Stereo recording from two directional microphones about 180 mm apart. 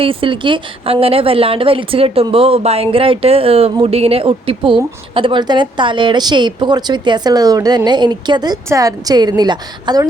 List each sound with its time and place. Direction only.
0.0 s a woman's voice: 30° right (ahead or behind)